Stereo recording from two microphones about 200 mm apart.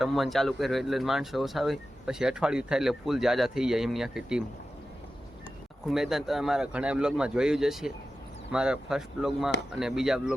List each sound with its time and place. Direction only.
0.0 s speech: centre (ahead or behind)
5.9 s speech: centre (ahead or behind)